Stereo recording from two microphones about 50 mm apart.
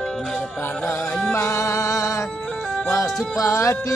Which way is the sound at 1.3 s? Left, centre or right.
Left.